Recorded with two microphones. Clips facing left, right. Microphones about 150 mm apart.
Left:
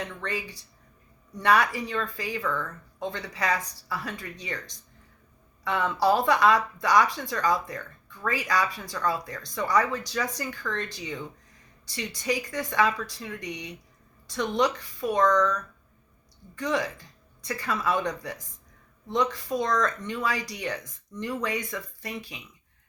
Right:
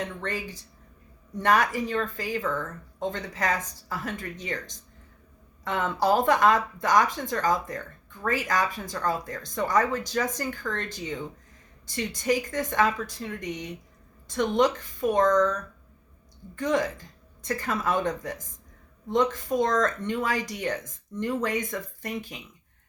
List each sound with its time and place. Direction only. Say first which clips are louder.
0.0 s speech: right 1 dB; 45° right (ahead or behind)
16.6 s speech: right 3 dB; 50° right (ahead or behind)